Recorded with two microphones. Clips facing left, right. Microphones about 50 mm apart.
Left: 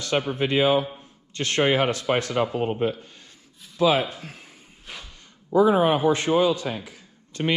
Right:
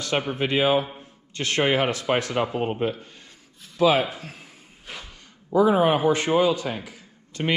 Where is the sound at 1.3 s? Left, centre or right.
Right.